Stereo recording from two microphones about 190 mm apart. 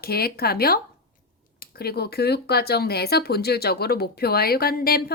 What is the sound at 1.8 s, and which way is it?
Speech, 55° left (ahead or behind).